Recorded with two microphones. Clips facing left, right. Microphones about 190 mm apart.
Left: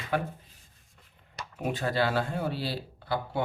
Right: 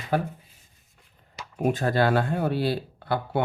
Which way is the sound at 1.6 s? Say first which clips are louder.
Right 6 dB; 45° right (ahead or behind).